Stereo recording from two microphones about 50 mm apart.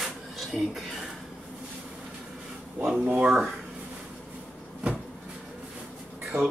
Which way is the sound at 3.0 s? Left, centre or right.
Right.